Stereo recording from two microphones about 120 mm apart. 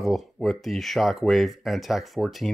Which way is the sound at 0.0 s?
Centre (ahead or behind).